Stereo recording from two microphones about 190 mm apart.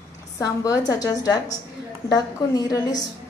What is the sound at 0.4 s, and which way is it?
A woman's voice, 20° left (ahead or behind).